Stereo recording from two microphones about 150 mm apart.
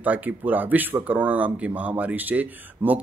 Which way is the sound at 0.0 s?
10° right (ahead or behind).